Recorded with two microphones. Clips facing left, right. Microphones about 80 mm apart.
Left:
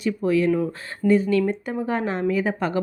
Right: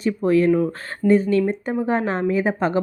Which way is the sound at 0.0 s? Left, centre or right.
Right.